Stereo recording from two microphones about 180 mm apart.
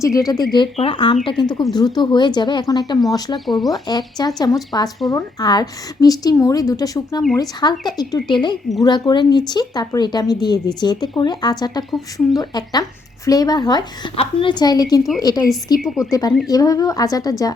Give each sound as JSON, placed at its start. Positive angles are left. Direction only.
{"t": 0.0, "sound": "speech", "side_deg": 20}
{"t": 3.4, "sound": "a woman's voice", "side_deg": 0}
{"t": 3.8, "sound": "speech", "side_deg": 25}
{"t": 15.8, "sound": "a woman's voice", "side_deg": 0}
{"t": 16.5, "sound": "speech", "side_deg": 20}